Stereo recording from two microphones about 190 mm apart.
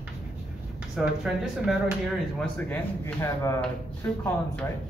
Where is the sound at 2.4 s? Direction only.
10° left (ahead or behind).